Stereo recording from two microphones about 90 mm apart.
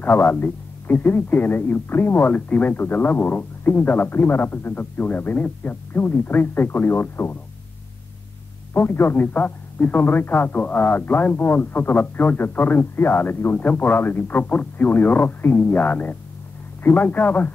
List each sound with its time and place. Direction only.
0.0 s speech: 20° left (ahead or behind)
8.7 s speech: 25° left (ahead or behind)